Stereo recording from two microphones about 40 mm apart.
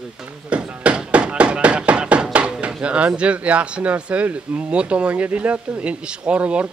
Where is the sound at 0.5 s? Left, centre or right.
Right.